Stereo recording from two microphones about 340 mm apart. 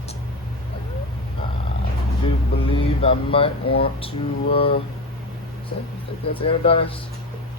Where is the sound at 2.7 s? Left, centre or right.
Centre.